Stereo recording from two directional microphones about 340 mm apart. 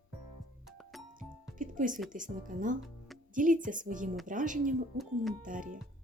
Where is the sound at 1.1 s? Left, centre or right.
Right.